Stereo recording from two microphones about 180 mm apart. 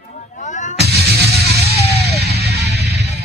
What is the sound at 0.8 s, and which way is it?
Music, 65° right (ahead or behind).